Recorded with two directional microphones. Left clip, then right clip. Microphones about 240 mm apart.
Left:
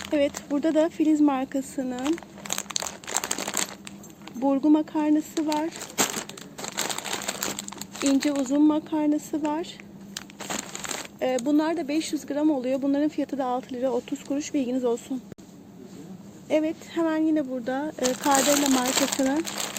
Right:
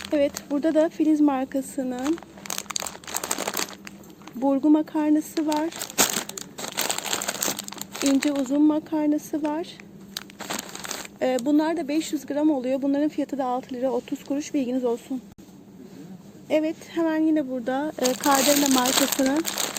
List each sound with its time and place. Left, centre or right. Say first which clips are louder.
0.0 s speech: right 1 dB; centre
2.5 s crumpling: even; centre
3.2 s a sound: right 4 dB; centre
4.4 s speech: right 1 dB; centre
5.3 s speech: right 2 dB; centre
6.0 s a sound: right 3 dB; right
6.7 s crumpling: right 3 dB; right
8.3 s speech: right 1 dB; centre
10.4 s crumpling: even; centre
11.2 s speech: right 2 dB; centre
16.5 s speech: right 1 dB; centre